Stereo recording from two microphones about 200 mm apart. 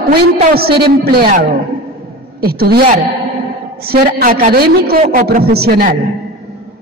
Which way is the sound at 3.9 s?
50° right (ahead or behind).